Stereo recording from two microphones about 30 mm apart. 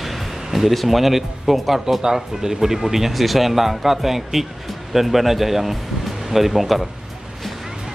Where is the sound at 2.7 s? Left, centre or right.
Centre.